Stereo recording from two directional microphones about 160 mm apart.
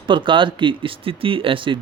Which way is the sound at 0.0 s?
30° right (ahead or behind).